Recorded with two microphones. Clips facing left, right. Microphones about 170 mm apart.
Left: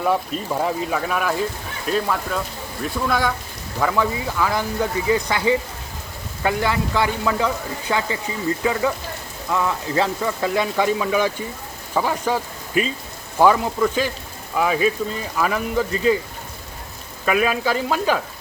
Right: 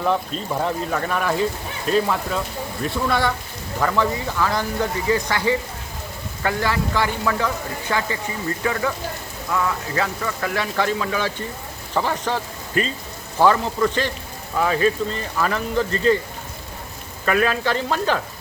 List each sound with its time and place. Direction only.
0.6 s speech: 5° left (ahead or behind)
17.2 s speech: 10° left (ahead or behind)